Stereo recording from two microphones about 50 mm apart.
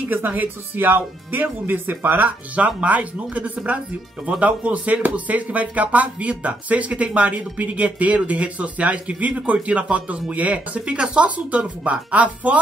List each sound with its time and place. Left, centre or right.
0.1 s speech: right